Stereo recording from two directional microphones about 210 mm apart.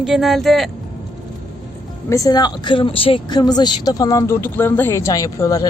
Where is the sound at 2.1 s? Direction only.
15° left (ahead or behind).